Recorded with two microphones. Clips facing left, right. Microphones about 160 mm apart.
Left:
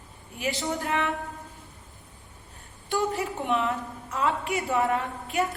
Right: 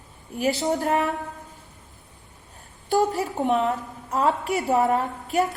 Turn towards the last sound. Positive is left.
turn(degrees=-40)  # may be behind; listen again after turning